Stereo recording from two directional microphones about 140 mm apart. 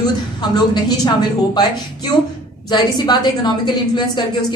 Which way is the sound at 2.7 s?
30° left (ahead or behind).